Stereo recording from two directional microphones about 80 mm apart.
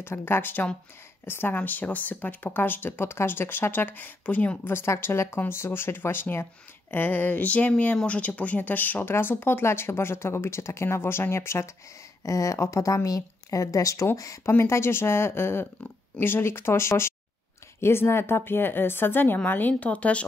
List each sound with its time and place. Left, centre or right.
0.0 s speech: left